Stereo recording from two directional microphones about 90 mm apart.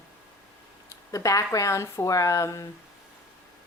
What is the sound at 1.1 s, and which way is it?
A woman's voice, 40° left (ahead or behind).